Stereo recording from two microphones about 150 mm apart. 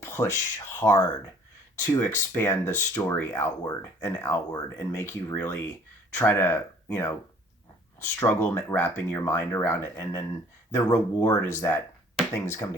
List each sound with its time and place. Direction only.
0.0 s speech: 15° left (ahead or behind)